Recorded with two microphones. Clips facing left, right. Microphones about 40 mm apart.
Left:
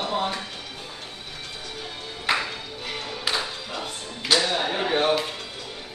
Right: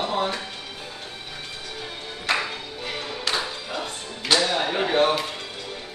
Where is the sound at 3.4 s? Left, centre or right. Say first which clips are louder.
Right 2 dB; centre.